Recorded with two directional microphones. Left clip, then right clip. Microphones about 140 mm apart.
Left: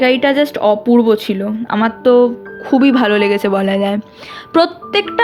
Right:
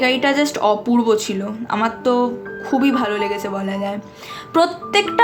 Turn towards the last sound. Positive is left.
turn(degrees=45)  # may be behind; listen again after turning